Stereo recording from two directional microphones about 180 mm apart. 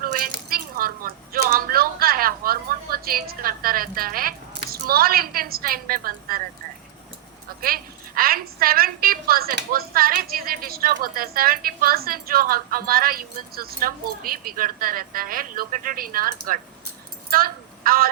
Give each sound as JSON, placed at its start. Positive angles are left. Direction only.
{"t": 0.0, "sound": "dishes", "side_deg": -50}
{"t": 0.3, "sound": "a sound", "side_deg": -55}
{"t": 7.6, "sound": "a woman's voice", "side_deg": -55}